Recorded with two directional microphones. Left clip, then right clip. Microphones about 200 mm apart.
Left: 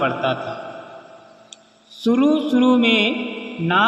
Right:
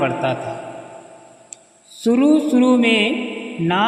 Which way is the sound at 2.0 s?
40° right (ahead or behind).